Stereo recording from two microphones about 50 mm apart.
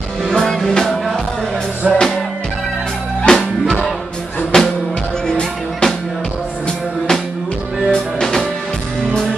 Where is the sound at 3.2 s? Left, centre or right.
Centre.